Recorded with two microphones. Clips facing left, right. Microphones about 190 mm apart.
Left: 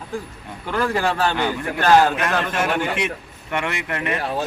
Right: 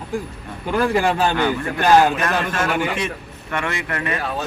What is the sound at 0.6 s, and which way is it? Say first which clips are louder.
A man's voice: right 3 dB; 15° right (ahead or behind).